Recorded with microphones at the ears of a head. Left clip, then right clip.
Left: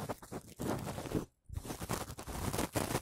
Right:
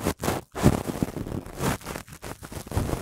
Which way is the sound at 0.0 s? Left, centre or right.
Right.